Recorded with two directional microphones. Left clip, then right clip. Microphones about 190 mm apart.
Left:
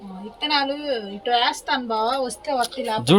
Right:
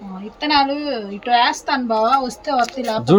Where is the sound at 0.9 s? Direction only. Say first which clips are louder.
Right 4 dB; 40° right (ahead or behind).